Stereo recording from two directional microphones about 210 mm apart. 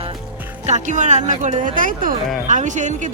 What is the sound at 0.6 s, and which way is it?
A woman's voice, 35° right (ahead or behind).